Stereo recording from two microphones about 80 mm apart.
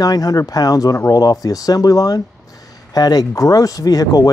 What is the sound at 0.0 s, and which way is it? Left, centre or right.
Speech, left.